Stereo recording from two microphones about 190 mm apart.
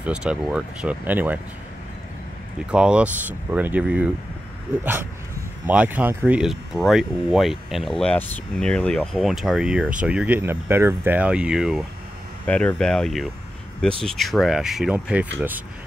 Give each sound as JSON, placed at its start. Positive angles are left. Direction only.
{"t": 0.0, "sound": "speech", "side_deg": -5}
{"t": 2.7, "sound": "speech", "side_deg": -5}
{"t": 5.7, "sound": "speech", "side_deg": -10}